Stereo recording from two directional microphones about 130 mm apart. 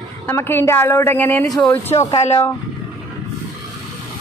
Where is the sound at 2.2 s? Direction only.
50° left (ahead or behind).